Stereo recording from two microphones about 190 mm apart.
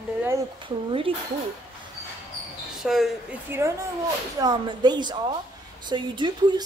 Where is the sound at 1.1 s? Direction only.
30° right (ahead or behind).